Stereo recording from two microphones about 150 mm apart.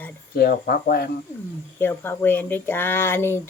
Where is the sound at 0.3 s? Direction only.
90° left.